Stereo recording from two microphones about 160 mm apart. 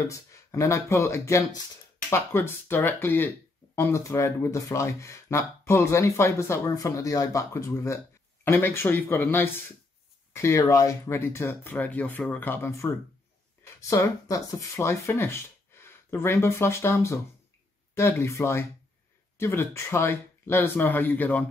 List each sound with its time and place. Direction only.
0.1 s speech: 20° left (ahead or behind)